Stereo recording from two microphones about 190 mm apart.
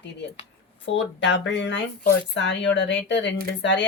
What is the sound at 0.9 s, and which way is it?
Speech, 70° left (ahead or behind).